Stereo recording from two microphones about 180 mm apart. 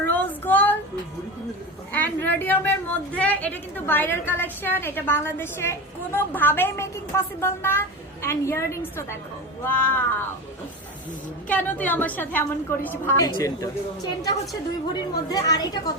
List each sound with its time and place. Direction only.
0.0 s child singing: 10° left (ahead or behind)
1.9 s a woman's voice: 10° left (ahead or behind)
11.4 s a woman's voice: 10° left (ahead or behind)